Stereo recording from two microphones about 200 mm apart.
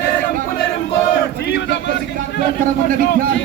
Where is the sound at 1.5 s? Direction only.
60° left (ahead or behind).